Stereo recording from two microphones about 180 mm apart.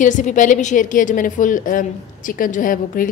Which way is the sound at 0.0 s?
45° left (ahead or behind).